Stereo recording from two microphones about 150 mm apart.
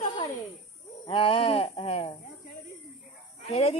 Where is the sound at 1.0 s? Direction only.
35° left (ahead or behind).